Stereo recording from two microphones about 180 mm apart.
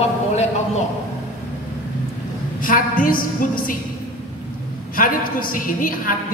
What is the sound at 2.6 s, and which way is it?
A woman's voice, 50° left (ahead or behind).